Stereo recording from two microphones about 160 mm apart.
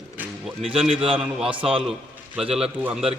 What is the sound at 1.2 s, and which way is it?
A man's voice, centre (ahead or behind).